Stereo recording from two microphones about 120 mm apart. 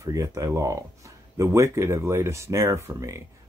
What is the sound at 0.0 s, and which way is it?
Speech, 25° right (ahead or behind).